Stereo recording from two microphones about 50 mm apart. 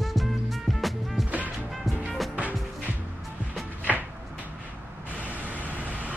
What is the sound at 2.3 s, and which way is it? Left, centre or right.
Music, right.